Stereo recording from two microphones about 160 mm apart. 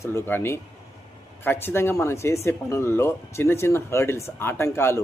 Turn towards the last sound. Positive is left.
turn(degrees=15)  # may be behind; listen again after turning